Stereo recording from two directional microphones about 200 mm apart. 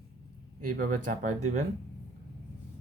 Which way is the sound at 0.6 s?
40° right (ahead or behind).